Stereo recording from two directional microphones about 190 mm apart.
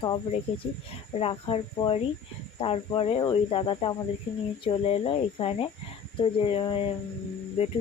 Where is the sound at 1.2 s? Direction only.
30° left (ahead or behind).